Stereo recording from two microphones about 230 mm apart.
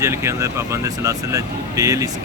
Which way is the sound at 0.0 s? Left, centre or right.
Centre.